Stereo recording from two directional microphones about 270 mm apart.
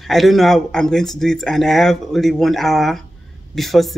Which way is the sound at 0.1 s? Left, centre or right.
Centre.